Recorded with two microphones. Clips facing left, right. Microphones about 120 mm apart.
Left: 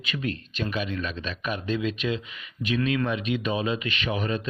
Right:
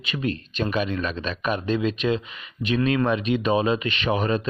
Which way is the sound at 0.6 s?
50° right (ahead or behind).